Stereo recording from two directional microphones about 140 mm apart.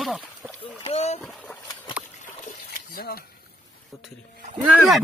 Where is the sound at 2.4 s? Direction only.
80° left.